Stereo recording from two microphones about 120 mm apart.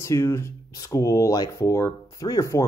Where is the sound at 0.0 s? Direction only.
25° left (ahead or behind).